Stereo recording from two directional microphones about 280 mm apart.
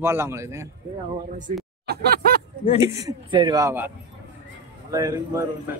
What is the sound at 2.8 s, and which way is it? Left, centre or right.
Speech, centre.